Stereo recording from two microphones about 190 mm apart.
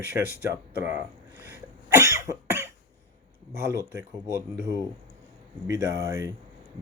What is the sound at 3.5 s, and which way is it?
Speech, 15° right (ahead or behind).